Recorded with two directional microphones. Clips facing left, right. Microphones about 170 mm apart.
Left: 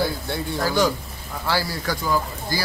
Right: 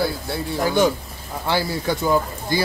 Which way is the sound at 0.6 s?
20° right (ahead or behind).